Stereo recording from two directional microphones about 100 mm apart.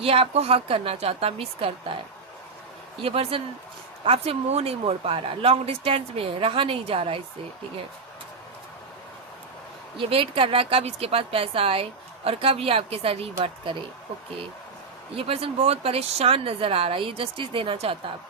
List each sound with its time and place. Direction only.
0.0 s a woman's voice: 80° right
3.0 s a woman's voice: 70° right (ahead or behind)
10.0 s a woman's voice: 65° right (ahead or behind)
15.1 s a woman's voice: 70° right (ahead or behind)